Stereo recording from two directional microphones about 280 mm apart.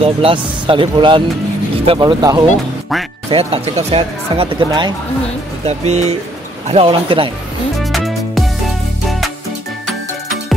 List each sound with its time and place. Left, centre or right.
0.0 s speech: centre
7.8 s music: centre